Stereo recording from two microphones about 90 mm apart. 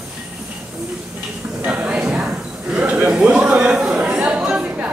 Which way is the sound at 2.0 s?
5° right (ahead or behind).